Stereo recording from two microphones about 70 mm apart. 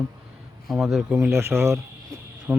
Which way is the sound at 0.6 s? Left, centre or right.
Centre.